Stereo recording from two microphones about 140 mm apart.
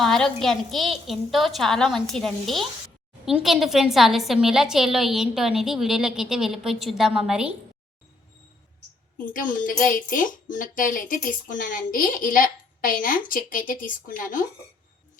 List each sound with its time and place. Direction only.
0.0 s a woman's voice: 5° left (ahead or behind)
9.3 s speech: 75° left (ahead or behind)